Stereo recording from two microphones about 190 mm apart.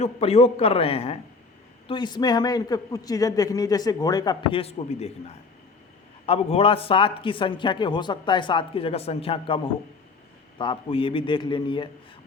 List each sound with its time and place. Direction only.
0.0 s a man's voice: 35° left (ahead or behind)
6.2 s speech: 30° left (ahead or behind)
10.6 s speech: 25° left (ahead or behind)